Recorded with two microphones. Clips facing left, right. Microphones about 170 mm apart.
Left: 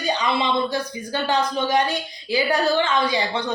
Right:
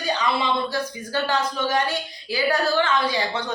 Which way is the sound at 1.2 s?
15° left (ahead or behind).